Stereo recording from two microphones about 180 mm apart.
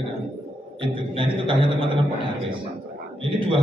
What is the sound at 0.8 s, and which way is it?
A man's voice, 30° right (ahead or behind).